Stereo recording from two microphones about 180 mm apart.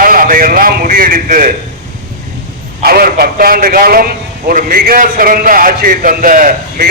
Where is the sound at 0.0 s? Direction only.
50° right (ahead or behind).